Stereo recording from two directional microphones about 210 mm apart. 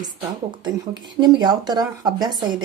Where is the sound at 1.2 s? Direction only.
20° right (ahead or behind).